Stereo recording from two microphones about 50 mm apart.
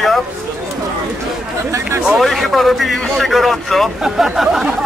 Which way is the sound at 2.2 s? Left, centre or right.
Centre.